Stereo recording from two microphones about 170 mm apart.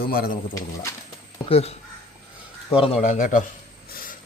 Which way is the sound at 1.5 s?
35° left (ahead or behind).